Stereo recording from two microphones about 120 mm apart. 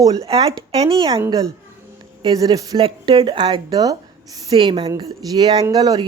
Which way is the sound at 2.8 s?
45° right (ahead or behind).